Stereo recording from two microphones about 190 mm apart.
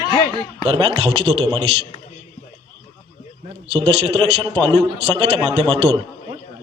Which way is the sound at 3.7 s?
30° right (ahead or behind).